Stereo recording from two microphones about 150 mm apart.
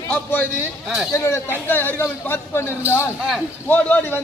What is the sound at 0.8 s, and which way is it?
Speech, centre (ahead or behind).